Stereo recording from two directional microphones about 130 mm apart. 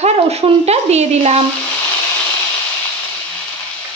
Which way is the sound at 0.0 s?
55° right (ahead or behind).